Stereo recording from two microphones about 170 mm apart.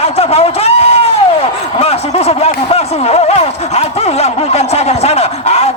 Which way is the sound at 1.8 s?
35° left (ahead or behind).